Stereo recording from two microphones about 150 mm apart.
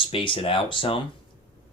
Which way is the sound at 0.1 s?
35° left (ahead or behind).